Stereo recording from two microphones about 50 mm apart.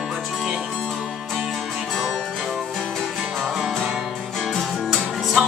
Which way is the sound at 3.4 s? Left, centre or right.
Centre.